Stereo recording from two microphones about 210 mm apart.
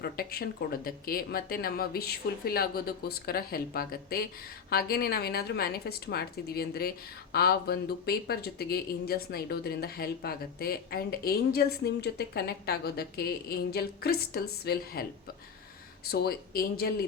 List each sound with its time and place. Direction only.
0.0 s speech: 45° left (ahead or behind)
16.1 s speech: 45° left (ahead or behind)